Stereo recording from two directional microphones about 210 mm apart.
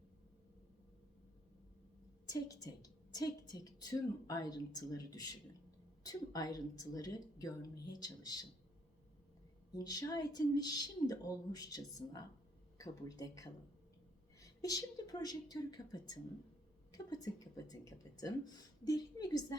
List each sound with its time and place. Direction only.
2.2 s a woman's voice: 15° left (ahead or behind)
9.7 s a woman's voice: 20° left (ahead or behind)
17.7 s a woman's voice: 15° left (ahead or behind)